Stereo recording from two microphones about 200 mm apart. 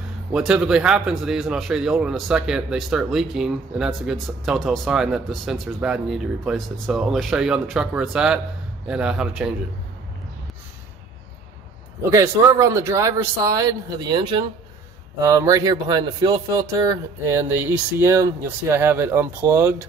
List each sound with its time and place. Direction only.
0.3 s speech: 5° right (ahead or behind)
12.0 s speech: 15° right (ahead or behind)